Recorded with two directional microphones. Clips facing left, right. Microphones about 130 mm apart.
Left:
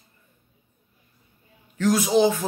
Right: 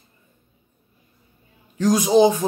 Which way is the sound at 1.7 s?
15° right (ahead or behind).